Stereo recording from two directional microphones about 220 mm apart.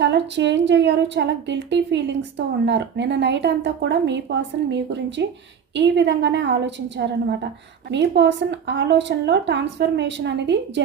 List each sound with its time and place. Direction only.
0.0 s speech: 50° right (ahead or behind)